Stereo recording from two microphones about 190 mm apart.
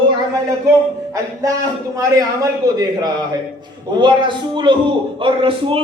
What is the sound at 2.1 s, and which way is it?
A man's voice, 20° right (ahead or behind).